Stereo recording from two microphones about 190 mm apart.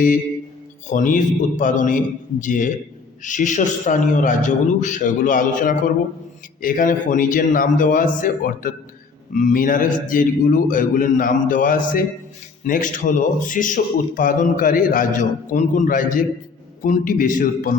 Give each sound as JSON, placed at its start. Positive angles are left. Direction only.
{"t": 0.9, "sound": "a man's voice", "side_deg": 45}